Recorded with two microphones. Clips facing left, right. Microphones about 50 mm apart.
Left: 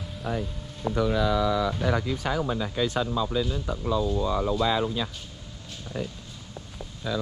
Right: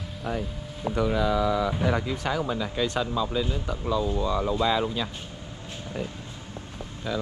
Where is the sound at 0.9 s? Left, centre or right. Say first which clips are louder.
Even; right.